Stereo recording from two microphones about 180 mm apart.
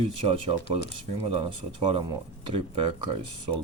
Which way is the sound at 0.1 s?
30° right (ahead or behind).